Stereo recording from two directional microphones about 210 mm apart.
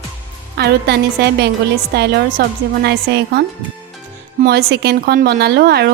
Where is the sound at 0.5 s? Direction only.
50° right (ahead or behind).